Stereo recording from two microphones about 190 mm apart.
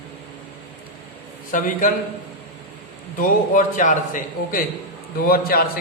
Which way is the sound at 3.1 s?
45° left (ahead or behind).